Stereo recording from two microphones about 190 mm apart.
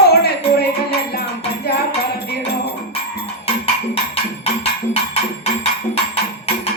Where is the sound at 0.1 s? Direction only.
55° left (ahead or behind).